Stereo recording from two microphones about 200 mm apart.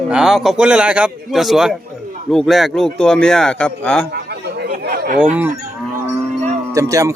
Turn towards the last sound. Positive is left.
turn(degrees=-15)  # may be behind; listen again after turning